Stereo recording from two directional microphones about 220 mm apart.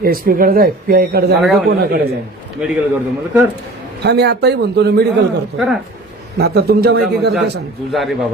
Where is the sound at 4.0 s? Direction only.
50° right (ahead or behind).